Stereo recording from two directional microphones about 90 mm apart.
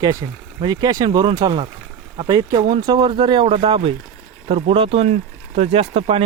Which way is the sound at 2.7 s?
65° right (ahead or behind).